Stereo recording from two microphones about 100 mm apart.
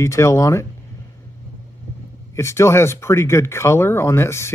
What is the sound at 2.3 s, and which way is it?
Speech, 30° left (ahead or behind).